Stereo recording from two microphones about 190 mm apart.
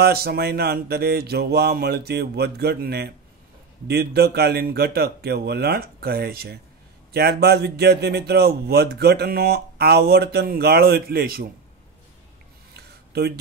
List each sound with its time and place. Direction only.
0.0 s speech: 55° right (ahead or behind)